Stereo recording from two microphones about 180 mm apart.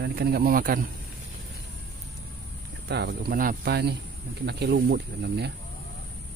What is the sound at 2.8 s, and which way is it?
Speech, 65° right (ahead or behind).